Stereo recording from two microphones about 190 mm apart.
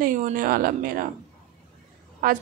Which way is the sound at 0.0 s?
45° right (ahead or behind).